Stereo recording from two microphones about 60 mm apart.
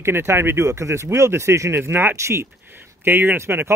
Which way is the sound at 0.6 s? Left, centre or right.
Right.